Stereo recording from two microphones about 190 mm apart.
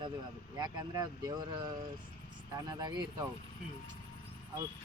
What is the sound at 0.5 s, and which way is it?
Speech, 20° right (ahead or behind).